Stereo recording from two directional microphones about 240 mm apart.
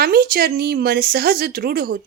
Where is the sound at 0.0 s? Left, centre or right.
Right.